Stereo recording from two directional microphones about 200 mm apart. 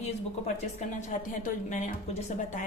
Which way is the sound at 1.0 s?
35° left (ahead or behind).